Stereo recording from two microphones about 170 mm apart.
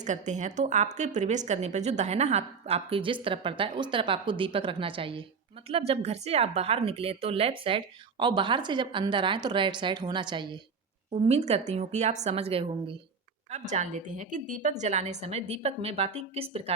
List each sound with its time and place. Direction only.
0.0 s a woman's voice: 45° right (ahead or behind); by 10.6 s 25° right (ahead or behind)
11.1 s a woman's voice: 40° right (ahead or behind)